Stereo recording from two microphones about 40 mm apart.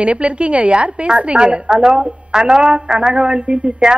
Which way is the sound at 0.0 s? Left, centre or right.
Right.